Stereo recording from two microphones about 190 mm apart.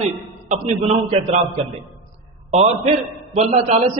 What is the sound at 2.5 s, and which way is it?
A man's voice, 35° right (ahead or behind).